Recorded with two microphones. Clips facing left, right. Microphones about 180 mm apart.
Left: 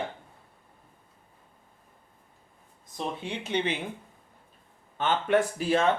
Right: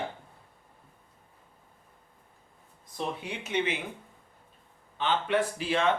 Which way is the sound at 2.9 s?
30° left (ahead or behind).